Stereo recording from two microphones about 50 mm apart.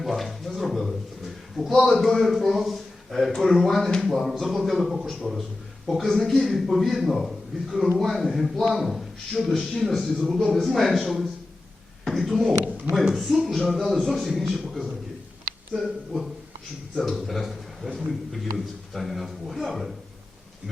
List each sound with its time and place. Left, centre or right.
0.0 s a sound: centre
1.8 s a man's voice: centre
12.6 s speech: right
13.3 s a man's voice: centre
15.7 s a man's voice: centre